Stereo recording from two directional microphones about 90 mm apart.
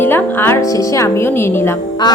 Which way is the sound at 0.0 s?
25° left (ahead or behind).